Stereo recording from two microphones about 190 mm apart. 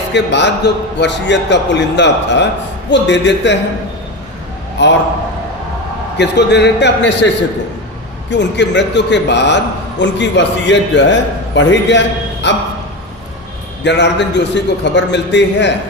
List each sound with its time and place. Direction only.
0.1 s a man's voice: 65° left (ahead or behind)
4.8 s a man's voice: 65° left (ahead or behind)
6.1 s a man's voice: 65° left (ahead or behind)
8.3 s a man's voice: 70° left (ahead or behind)
13.8 s a man's voice: 65° left (ahead or behind)